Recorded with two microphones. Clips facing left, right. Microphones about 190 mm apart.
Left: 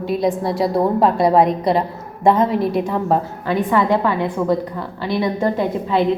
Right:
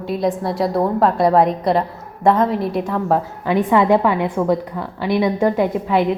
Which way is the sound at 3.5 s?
20° right (ahead or behind).